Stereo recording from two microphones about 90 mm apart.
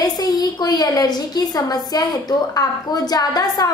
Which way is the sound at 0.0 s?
45° left (ahead or behind).